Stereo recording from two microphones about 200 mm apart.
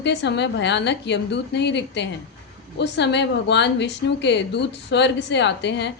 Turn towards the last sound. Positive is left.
turn(degrees=60)  # may be behind; listen again after turning